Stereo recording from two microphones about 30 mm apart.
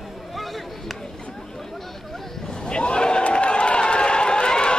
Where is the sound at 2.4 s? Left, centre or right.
Left.